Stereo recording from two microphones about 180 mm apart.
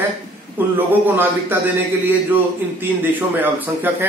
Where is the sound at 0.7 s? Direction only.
10° right (ahead or behind).